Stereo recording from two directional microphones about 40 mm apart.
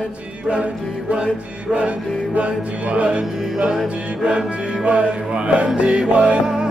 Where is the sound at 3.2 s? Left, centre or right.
Centre.